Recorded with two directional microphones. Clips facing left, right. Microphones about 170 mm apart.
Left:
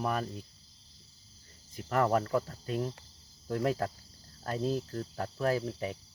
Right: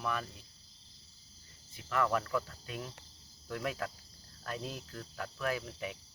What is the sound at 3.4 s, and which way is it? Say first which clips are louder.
Speech: left 7 dB; 35° left (ahead or behind).